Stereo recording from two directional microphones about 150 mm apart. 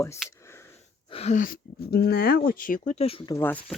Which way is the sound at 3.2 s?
15° left (ahead or behind).